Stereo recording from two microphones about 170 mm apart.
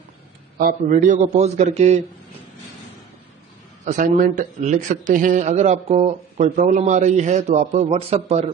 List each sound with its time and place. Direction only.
0.6 s a man's voice: 55° right (ahead or behind)
3.8 s a man's voice: 50° right (ahead or behind)